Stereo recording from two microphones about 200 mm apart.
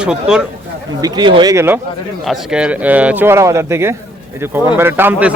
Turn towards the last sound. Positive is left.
turn(degrees=-10)  # may be behind; listen again after turning